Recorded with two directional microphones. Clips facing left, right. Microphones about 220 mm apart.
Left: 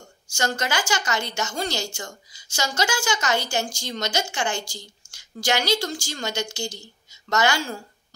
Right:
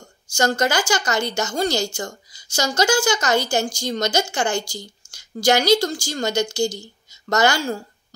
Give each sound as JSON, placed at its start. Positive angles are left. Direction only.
{"t": 0.3, "sound": "a woman's voice", "side_deg": -40}